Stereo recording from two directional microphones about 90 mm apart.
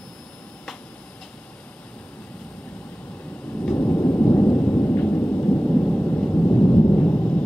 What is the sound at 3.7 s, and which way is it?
Thunder, 25° left (ahead or behind).